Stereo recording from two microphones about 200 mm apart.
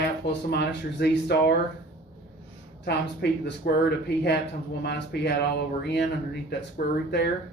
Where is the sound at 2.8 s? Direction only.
55° left (ahead or behind).